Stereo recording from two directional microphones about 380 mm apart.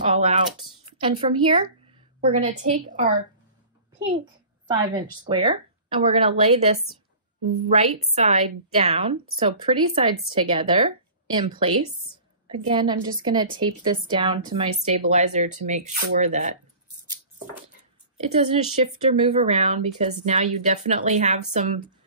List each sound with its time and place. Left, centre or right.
0.0 s a woman's voice: centre
4.6 s a woman's voice: centre
18.3 s a woman's voice: centre